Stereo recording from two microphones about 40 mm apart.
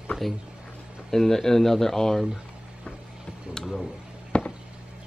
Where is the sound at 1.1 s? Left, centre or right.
Centre.